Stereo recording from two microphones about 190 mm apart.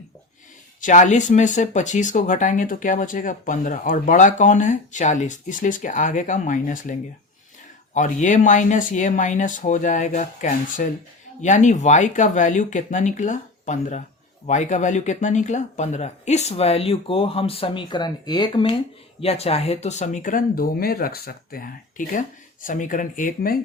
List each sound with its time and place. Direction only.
0.8 s speech: 40° left (ahead or behind)
7.9 s speech: 40° left (ahead or behind)